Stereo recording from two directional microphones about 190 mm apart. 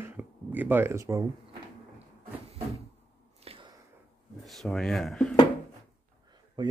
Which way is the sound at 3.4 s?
30° right (ahead or behind).